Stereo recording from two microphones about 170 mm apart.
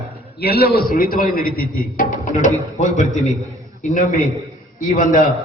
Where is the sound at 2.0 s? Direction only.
50° left (ahead or behind).